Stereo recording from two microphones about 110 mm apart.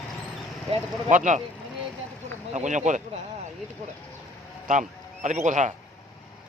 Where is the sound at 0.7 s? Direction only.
60° right (ahead or behind).